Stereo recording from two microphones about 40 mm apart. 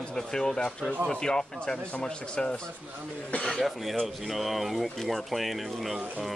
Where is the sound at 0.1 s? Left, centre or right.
Centre.